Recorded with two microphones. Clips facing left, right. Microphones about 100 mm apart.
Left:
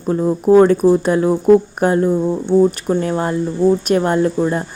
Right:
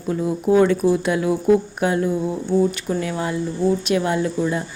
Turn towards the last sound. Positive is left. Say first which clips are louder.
# left 5 dB
turn(degrees=45)  # may be behind; listen again after turning